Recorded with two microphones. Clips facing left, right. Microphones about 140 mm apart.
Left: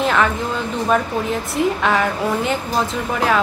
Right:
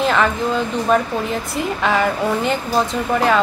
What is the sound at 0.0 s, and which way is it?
Speech, centre (ahead or behind).